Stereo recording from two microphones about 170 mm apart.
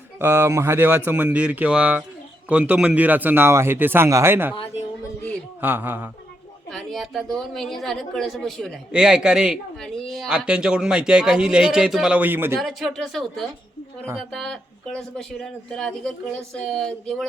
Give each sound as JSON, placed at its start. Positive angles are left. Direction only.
{"t": 0.2, "sound": "speech", "side_deg": -15}
{"t": 4.5, "sound": "a sound", "side_deg": 35}
{"t": 5.5, "sound": "speech", "side_deg": -10}
{"t": 6.7, "sound": "a woman's voice", "side_deg": 0}
{"t": 12.5, "sound": "a woman's voice", "side_deg": 0}